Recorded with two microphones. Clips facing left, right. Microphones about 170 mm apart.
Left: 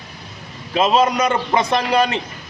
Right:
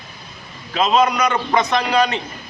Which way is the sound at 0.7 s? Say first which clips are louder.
Left 1 dB; 30° left (ahead or behind).